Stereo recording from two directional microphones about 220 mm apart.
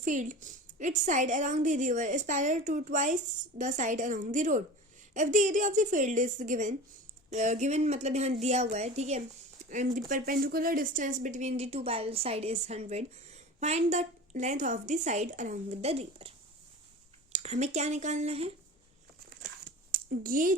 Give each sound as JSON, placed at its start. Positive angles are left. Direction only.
{"t": 0.0, "sound": "a woman's voice", "side_deg": -35}
{"t": 17.3, "sound": "a woman's voice", "side_deg": -30}
{"t": 19.6, "sound": "a sound", "side_deg": -40}